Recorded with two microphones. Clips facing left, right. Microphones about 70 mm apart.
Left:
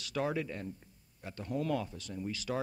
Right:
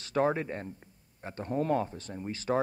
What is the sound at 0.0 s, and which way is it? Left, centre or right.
Speech, right.